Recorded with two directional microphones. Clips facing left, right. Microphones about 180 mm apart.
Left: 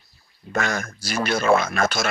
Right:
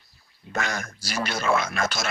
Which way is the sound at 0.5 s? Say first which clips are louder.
Left 4 dB; 50° left (ahead or behind).